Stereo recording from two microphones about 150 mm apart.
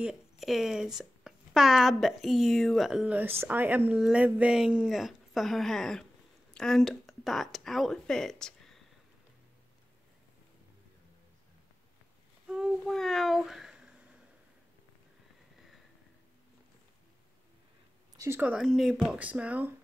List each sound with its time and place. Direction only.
0.0 s speech: 5° right (ahead or behind)
12.4 s child singing: 5° right (ahead or behind)
18.1 s speech: 20° right (ahead or behind)